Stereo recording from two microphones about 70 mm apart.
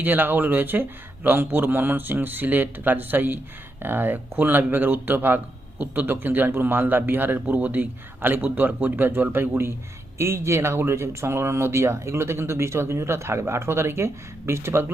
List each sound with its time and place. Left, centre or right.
0.0 s speech: right